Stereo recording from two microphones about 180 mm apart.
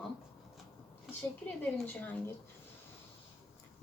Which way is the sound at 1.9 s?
10° left (ahead or behind).